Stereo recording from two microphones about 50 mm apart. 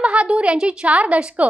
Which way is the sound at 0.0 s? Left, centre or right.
Right.